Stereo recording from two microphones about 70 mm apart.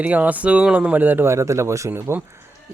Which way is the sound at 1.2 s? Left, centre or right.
Right.